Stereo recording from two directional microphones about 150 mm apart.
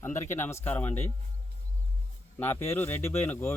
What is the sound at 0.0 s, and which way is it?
Speech, 15° left (ahead or behind).